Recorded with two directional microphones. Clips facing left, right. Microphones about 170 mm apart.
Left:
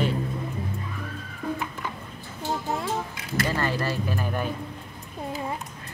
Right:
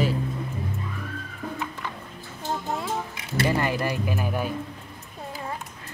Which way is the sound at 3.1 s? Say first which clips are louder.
Right 3 dB; 15° right (ahead or behind).